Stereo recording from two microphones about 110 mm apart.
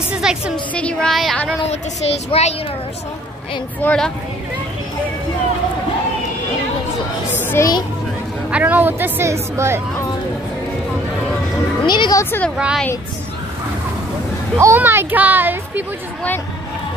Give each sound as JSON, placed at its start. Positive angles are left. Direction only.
{"t": 0.1, "sound": "a woman's voice", "side_deg": -5}
{"t": 0.7, "sound": "speech", "side_deg": 10}
{"t": 1.1, "sound": "speech", "side_deg": 0}
{"t": 1.7, "sound": "speech", "side_deg": 75}
{"t": 3.8, "sound": "speech", "side_deg": 10}
{"t": 7.3, "sound": "children playing", "side_deg": 20}
{"t": 8.5, "sound": "a woman's voice", "side_deg": -15}
{"t": 11.8, "sound": "speech", "side_deg": 45}
{"t": 12.2, "sound": "a woman's voice", "side_deg": 20}
{"t": 12.5, "sound": "a woman's voice", "side_deg": -10}
{"t": 14.6, "sound": "a woman's voice", "side_deg": -20}